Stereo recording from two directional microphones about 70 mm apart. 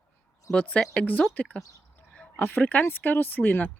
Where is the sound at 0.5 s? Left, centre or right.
Centre.